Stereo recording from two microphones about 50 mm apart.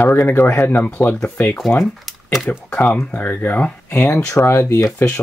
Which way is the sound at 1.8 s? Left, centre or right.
Centre.